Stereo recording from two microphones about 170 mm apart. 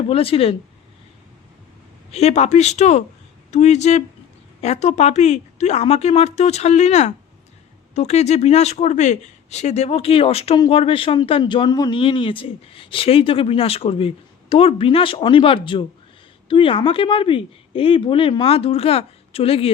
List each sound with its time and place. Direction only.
0.1 s speech: 35° left (ahead or behind)
2.1 s speech: 40° left (ahead or behind)